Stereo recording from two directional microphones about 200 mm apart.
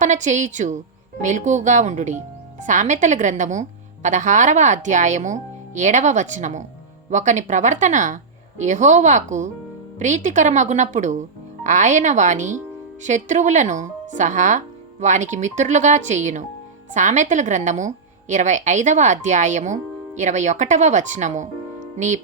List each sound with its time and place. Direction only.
0.0 s speech: 35° right (ahead or behind)